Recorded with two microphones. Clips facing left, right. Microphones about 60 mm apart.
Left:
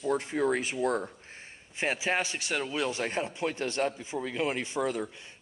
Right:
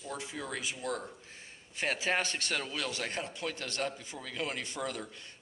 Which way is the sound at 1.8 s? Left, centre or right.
Centre.